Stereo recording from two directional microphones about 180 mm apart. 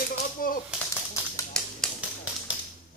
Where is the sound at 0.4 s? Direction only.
50° left (ahead or behind).